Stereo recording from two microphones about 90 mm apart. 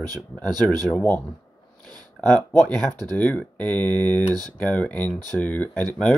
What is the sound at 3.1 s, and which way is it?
Speech, 15° left (ahead or behind).